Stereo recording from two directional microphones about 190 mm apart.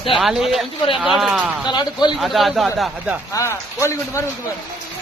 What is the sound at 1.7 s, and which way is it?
Speech, 25° left (ahead or behind).